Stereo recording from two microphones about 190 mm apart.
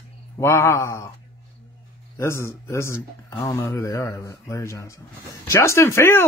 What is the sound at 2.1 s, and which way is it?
Speech, 15° left (ahead or behind).